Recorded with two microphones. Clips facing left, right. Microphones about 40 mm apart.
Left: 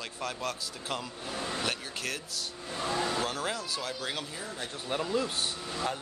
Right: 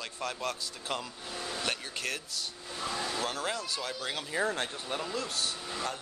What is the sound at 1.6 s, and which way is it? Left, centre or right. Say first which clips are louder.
Speech: even; centre.